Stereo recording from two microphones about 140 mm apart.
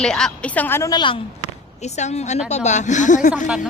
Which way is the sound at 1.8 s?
55° left (ahead or behind).